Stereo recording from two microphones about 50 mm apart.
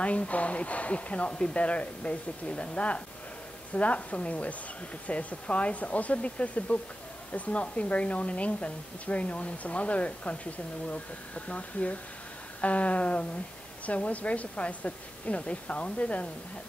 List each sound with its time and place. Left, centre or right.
0.0 s speech: left